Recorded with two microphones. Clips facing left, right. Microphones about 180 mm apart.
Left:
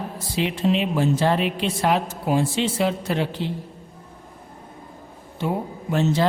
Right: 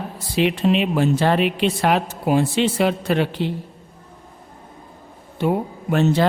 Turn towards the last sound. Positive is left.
turn(degrees=-60)  # may be behind; listen again after turning